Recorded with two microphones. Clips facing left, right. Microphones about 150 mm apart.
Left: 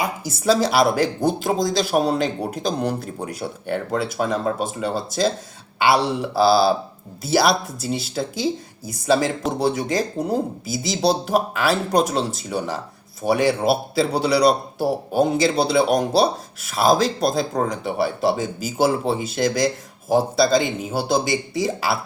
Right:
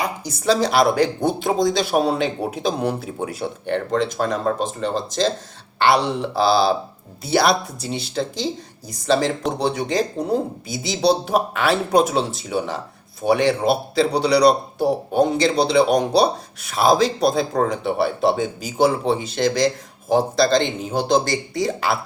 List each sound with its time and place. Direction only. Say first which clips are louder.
0.0 s speech: left 1 dB; 5° left (ahead or behind)